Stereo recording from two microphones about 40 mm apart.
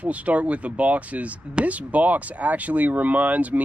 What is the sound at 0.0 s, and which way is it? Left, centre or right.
Speech, right.